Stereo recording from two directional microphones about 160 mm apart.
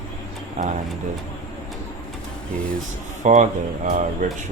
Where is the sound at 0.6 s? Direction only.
55° right (ahead or behind).